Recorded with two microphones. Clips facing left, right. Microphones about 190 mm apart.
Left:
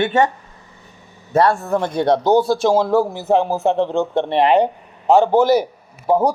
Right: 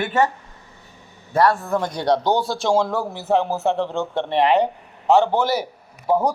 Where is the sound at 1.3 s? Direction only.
25° left (ahead or behind).